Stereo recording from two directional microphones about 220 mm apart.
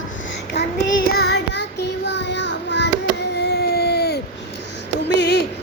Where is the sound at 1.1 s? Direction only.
50° left (ahead or behind).